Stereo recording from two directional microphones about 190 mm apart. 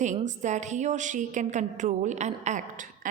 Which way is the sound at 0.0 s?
40° right (ahead or behind).